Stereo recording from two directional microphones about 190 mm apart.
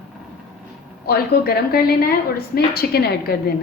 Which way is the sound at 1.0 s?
55° left (ahead or behind).